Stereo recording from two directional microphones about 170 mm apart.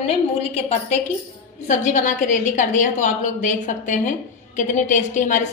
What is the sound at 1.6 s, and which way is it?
A woman's voice, 50° left (ahead or behind).